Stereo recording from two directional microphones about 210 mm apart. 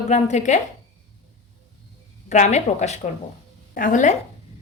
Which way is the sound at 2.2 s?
35° left (ahead or behind).